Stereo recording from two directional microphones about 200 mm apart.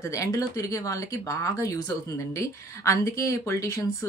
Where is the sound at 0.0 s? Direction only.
15° left (ahead or behind).